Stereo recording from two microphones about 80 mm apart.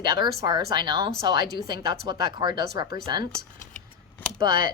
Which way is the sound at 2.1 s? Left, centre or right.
Right.